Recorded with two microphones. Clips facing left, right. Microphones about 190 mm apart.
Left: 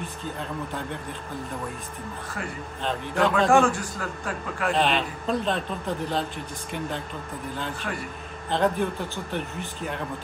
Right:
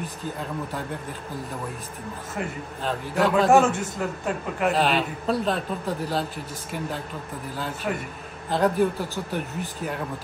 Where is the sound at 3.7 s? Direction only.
20° right (ahead or behind).